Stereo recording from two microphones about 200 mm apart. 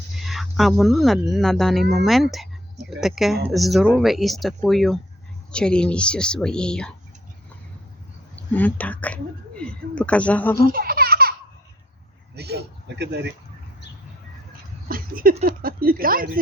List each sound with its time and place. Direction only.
0.3 s speech: centre (ahead or behind)
2.3 s a sound: centre (ahead or behind)
3.0 s speech: centre (ahead or behind)
8.4 s speech: 10° left (ahead or behind)
10.6 s speech: 45° right (ahead or behind)
12.4 s speech: 55° right (ahead or behind)
14.8 s a sound: 45° right (ahead or behind)
15.4 s speech: 45° right (ahead or behind)